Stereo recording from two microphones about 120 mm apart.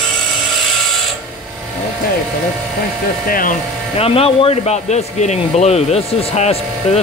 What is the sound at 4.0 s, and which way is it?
Speech, 50° left (ahead or behind).